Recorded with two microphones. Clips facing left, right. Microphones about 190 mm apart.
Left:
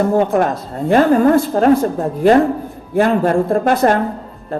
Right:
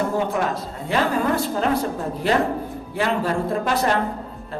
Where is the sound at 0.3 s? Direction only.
50° left (ahead or behind).